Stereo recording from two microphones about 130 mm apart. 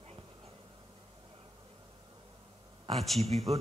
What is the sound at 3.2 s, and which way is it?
Speech, 55° right (ahead or behind).